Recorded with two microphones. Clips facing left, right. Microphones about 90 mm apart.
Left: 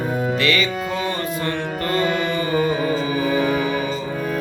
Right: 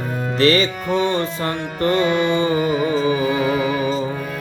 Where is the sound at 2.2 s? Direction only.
25° right (ahead or behind).